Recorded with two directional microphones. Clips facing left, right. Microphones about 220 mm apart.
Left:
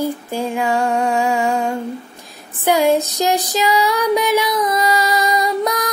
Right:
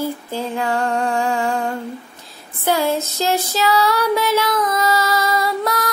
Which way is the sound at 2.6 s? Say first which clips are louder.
Left 4 dB; 15° left (ahead or behind).